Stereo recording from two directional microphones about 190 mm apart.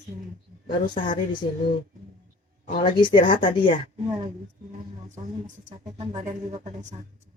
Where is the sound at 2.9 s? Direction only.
25° left (ahead or behind).